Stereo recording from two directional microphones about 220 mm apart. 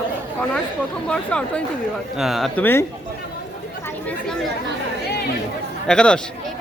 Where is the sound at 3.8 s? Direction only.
5° left (ahead or behind).